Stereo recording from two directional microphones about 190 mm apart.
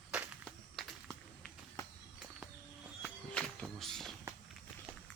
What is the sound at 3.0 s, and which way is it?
Walk, 5° left (ahead or behind).